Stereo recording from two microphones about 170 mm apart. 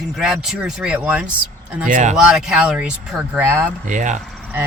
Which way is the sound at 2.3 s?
5° right (ahead or behind).